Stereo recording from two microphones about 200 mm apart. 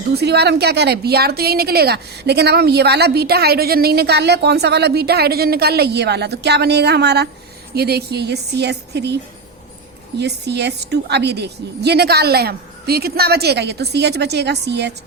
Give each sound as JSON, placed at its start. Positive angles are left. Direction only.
{"t": 0.1, "sound": "a woman's voice", "side_deg": -55}
{"t": 10.2, "sound": "a woman's voice", "side_deg": -55}